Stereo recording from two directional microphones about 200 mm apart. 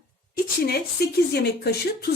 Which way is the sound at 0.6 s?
50° left (ahead or behind).